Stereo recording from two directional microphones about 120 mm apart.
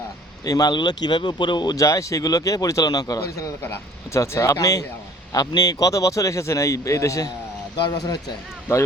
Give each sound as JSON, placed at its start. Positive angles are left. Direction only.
{"t": 0.4, "sound": "speech", "side_deg": 30}